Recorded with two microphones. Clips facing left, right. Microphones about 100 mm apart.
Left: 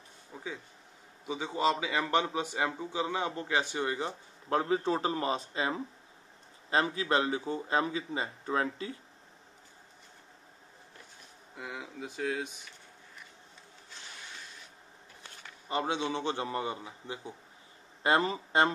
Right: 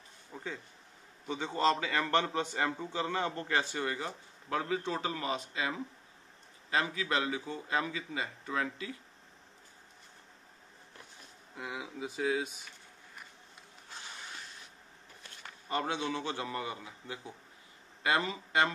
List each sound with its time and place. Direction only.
0.3 s a man's voice: 5° left (ahead or behind); by 8.9 s 30° left (ahead or behind)
11.5 s speech: centre (ahead or behind)
15.7 s a man's voice: 20° left (ahead or behind)
18.0 s speech: 35° left (ahead or behind)